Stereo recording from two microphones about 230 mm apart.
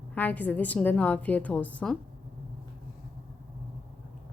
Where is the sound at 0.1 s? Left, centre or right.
Centre.